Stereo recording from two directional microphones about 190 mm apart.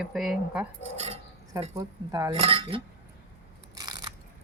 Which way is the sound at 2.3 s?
30° right (ahead or behind).